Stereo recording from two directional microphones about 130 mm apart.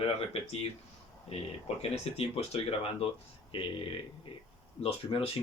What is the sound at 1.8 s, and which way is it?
Speech, 50° left (ahead or behind).